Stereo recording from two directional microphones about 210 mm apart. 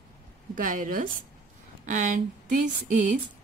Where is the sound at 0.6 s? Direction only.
40° right (ahead or behind).